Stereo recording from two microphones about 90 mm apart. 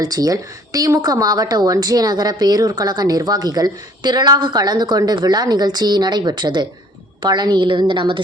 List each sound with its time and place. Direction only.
0.0 s a woman's voice: 45° right (ahead or behind); by 8.2 s 65° right (ahead or behind)